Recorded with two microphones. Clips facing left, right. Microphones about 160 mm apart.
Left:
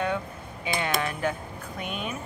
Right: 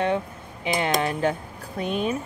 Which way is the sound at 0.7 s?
35° right (ahead or behind).